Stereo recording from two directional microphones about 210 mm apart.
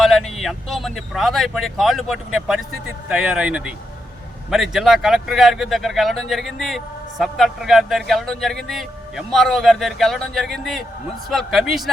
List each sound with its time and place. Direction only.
0.0 s speech: centre (ahead or behind)